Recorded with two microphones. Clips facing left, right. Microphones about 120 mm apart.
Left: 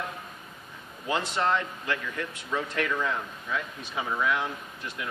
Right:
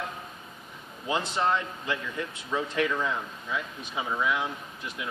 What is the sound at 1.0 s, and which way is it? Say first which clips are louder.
Speech: even; 20° right (ahead or behind).